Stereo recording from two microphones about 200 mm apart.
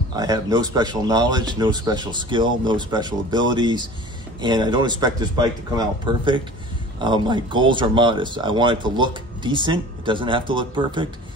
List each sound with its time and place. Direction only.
0.1 s speech: 20° right (ahead or behind)